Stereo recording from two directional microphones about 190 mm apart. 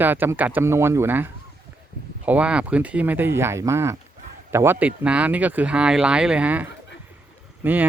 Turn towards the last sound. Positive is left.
turn(degrees=-10)  # may be behind; listen again after turning